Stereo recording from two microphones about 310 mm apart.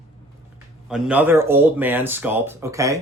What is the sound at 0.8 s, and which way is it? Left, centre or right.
Speech, centre.